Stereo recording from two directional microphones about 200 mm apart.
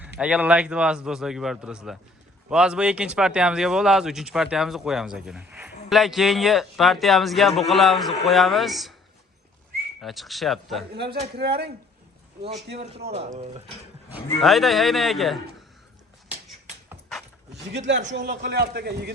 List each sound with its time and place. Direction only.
0.2 s speech: 5° right (ahead or behind)
10.0 s speech: centre (ahead or behind)
10.9 s speech: 55° right (ahead or behind)
12.4 s a man's voice: 30° right (ahead or behind)
14.4 s speech: centre (ahead or behind)
17.7 s speech: 60° right (ahead or behind)
18.3 s a man's voice: 50° right (ahead or behind)